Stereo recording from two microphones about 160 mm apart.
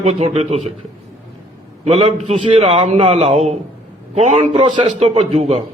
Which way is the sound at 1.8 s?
40° right (ahead or behind).